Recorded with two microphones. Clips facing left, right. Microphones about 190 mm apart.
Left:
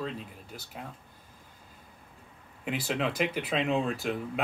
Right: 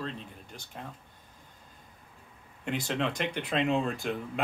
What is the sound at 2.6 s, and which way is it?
Speech, 5° left (ahead or behind).